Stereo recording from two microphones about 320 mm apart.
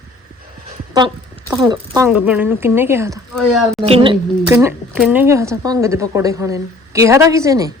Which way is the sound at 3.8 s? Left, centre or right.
Centre.